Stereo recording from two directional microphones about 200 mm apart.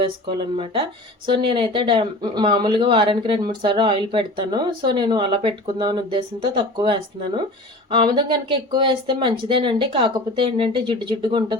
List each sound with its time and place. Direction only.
0.0 s speech: 25° right (ahead or behind)